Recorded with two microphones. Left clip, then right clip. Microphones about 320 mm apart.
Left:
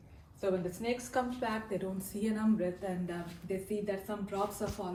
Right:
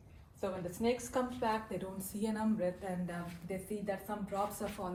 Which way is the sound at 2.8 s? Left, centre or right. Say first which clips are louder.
Left 3 dB; centre.